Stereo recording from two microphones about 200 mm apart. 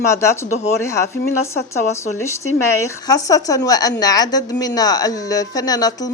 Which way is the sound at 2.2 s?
15° left (ahead or behind).